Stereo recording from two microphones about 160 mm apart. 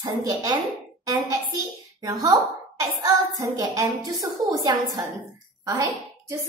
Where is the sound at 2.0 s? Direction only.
20° right (ahead or behind).